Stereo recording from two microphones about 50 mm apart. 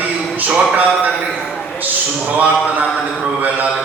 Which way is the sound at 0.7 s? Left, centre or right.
Right.